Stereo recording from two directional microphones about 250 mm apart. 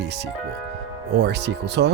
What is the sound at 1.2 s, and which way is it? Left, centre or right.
Speech, right.